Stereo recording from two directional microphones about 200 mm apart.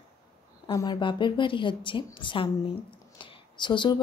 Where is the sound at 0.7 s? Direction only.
20° left (ahead or behind).